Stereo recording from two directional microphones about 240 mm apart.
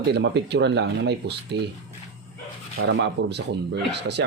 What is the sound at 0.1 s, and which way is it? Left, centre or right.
Speech, right.